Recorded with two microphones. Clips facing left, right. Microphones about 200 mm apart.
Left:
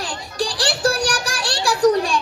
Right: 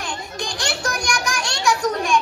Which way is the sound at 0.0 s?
35° left (ahead or behind).